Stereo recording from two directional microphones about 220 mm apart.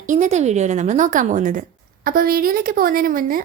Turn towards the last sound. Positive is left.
turn(degrees=-40)  # may be behind; listen again after turning